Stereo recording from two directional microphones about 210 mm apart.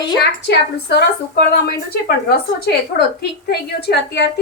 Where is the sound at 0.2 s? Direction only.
55° left (ahead or behind).